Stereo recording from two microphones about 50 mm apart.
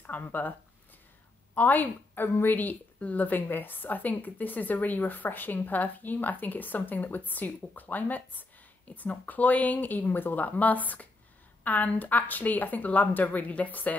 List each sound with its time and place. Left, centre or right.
0.0 s a woman's voice: left
2.5 s a woman's voice: left